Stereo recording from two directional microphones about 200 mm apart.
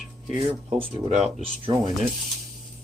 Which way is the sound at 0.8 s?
30° right (ahead or behind).